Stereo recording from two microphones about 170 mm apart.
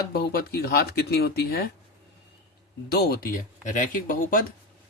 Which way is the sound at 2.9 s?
65° left (ahead or behind).